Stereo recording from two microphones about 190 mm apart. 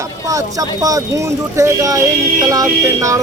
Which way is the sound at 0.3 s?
20° right (ahead or behind).